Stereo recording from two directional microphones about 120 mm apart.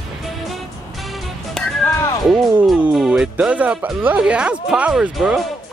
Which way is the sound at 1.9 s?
20° left (ahead or behind).